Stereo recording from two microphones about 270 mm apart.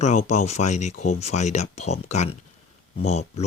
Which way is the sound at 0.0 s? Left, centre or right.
Left.